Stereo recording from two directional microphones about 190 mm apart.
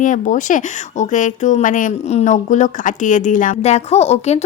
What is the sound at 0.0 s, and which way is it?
Speech, 40° left (ahead or behind).